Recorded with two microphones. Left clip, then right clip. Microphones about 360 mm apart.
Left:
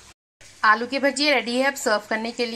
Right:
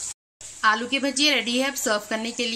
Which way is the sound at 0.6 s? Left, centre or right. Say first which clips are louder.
Left 3 dB; centre.